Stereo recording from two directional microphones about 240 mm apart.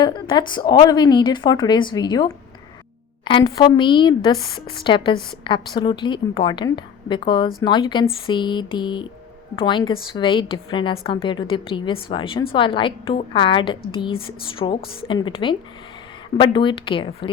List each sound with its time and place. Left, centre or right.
0.0 s a woman's voice: centre